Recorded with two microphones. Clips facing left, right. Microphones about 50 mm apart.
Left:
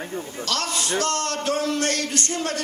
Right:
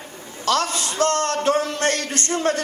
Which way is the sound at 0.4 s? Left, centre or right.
Right.